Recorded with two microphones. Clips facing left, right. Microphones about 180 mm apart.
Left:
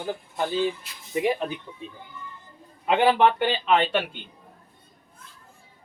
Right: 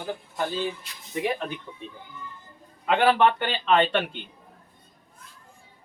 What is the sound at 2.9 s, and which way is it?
Speech, 15° left (ahead or behind).